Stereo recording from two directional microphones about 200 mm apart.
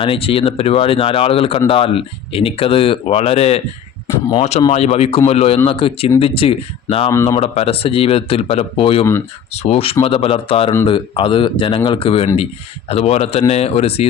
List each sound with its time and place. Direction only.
0.0 s speech: 25° left (ahead or behind)
7.1 s speech: 15° left (ahead or behind)
7.3 s speech: 30° left (ahead or behind)